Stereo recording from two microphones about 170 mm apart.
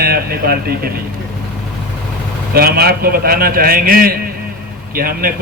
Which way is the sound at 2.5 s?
65° right (ahead or behind).